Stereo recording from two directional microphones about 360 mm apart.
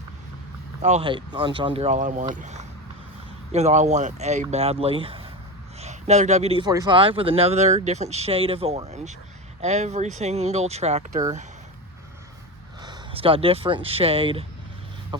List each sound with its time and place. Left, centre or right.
0.8 s speech: centre
12.8 s speech: centre
15.1 s a sound: centre